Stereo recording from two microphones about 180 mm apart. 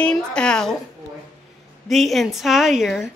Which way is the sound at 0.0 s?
5° left (ahead or behind).